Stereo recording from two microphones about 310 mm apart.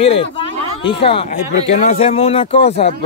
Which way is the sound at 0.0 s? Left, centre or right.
Centre.